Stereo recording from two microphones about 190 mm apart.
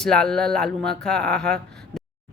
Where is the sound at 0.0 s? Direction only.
5° left (ahead or behind).